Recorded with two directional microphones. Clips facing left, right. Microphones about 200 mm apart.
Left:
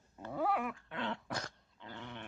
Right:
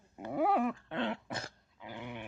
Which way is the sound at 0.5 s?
30° right (ahead or behind).